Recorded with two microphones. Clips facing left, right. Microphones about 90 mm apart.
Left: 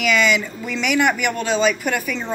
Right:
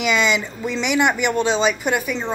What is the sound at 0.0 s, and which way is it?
Speech, 25° right (ahead or behind).